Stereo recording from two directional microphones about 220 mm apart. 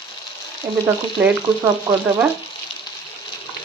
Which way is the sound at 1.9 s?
15° right (ahead or behind).